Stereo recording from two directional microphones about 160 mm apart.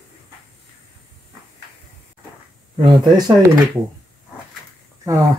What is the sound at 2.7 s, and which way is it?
Speech, 30° right (ahead or behind).